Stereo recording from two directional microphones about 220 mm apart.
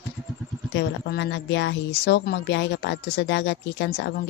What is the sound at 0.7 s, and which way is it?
Speech, 50° left (ahead or behind).